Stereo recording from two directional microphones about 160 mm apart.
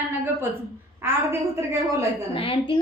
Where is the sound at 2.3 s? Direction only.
35° left (ahead or behind).